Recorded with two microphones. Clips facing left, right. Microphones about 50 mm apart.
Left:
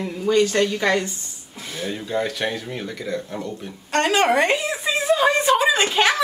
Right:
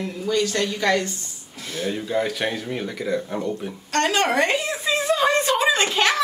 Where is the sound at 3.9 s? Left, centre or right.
Centre.